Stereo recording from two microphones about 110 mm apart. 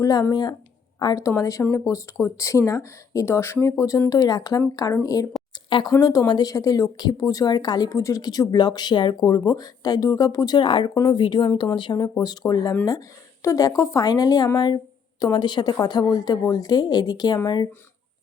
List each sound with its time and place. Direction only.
0.0 s speech: 35° left (ahead or behind)
5.6 s speech: 45° left (ahead or behind)
5.9 s speech: 35° left (ahead or behind)
10.6 s speech: 50° left (ahead or behind)
10.9 s speech: 40° left (ahead or behind)